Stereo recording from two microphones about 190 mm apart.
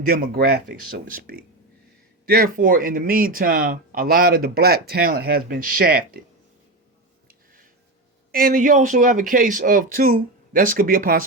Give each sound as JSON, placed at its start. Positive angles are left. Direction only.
{"t": 0.0, "sound": "speech", "side_deg": -50}
{"t": 8.3, "sound": "speech", "side_deg": -50}